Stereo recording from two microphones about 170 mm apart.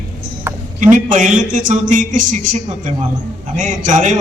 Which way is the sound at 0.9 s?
50° right (ahead or behind).